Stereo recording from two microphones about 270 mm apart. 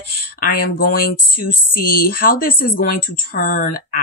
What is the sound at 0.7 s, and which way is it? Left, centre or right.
Speech, left.